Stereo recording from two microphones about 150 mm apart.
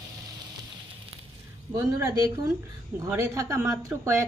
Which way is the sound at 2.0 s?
20° right (ahead or behind).